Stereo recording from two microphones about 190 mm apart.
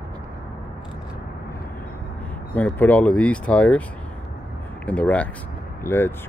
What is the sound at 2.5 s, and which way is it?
Speech, 10° left (ahead or behind).